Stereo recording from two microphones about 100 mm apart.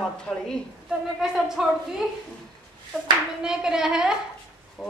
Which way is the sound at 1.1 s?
5° right (ahead or behind).